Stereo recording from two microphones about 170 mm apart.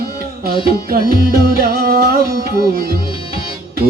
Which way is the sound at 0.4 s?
60° right (ahead or behind).